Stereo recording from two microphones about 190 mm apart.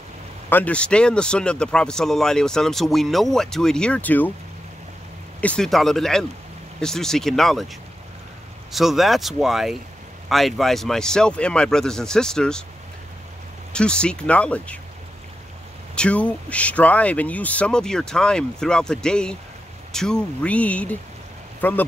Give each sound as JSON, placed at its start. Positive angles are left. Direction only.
{"t": 0.5, "sound": "a man's voice", "side_deg": 10}
{"t": 5.4, "sound": "a man's voice", "side_deg": 5}
{"t": 8.7, "sound": "a man's voice", "side_deg": 0}
{"t": 13.7, "sound": "speech", "side_deg": 5}
{"t": 15.9, "sound": "a man's voice", "side_deg": 5}